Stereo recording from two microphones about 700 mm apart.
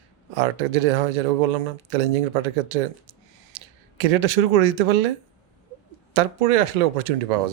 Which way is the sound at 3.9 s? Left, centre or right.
Right.